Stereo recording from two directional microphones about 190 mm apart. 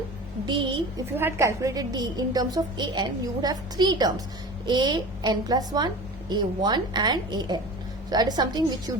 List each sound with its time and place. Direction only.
0.4 s a woman's voice: 25° right (ahead or behind)
1.1 s a woman's voice: 15° right (ahead or behind)